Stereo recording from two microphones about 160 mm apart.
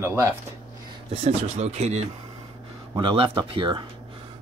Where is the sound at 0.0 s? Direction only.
15° right (ahead or behind).